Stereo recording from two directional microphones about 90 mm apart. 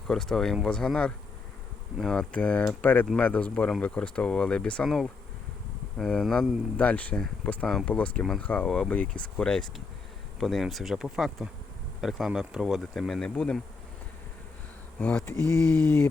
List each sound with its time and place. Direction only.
0.1 s speech: 5° left (ahead or behind)
6.7 s speech: 15° left (ahead or behind)
14.9 s speech: 15° left (ahead or behind)